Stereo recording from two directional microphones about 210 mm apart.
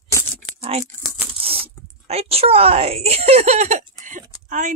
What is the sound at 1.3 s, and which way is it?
Speech, 25° right (ahead or behind).